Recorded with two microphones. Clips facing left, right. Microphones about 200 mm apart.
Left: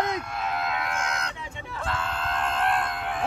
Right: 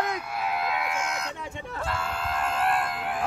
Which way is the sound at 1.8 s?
5° right (ahead or behind).